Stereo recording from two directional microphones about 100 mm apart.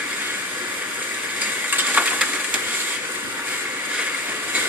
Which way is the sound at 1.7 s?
15° right (ahead or behind).